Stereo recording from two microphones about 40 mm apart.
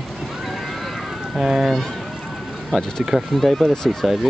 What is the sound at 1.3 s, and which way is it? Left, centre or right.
Speech, centre.